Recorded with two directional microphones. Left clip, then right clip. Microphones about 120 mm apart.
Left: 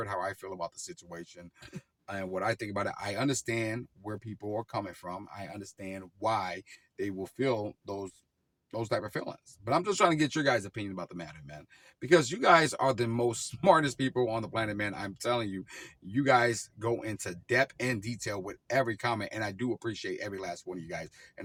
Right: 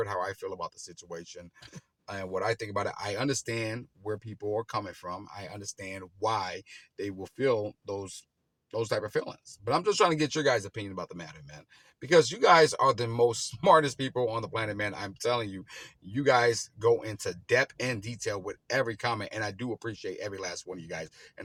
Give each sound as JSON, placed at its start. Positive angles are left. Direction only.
{"t": 0.0, "sound": "speech", "side_deg": -30}